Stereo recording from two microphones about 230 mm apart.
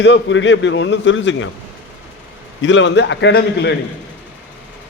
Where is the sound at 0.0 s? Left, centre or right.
Left.